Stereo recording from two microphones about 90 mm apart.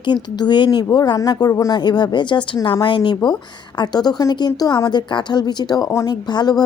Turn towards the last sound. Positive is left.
turn(degrees=50)  # may be behind; listen again after turning